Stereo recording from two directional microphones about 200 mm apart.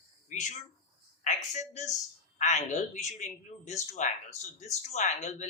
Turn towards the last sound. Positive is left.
turn(degrees=35)  # may be behind; listen again after turning